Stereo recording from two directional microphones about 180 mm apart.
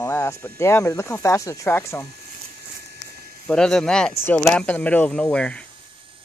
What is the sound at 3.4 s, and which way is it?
Speech, 5° left (ahead or behind).